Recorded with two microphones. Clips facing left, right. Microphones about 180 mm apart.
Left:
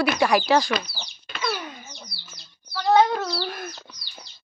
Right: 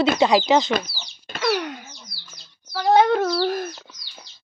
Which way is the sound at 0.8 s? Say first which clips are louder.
Left 1 dB; 60° left (ahead or behind).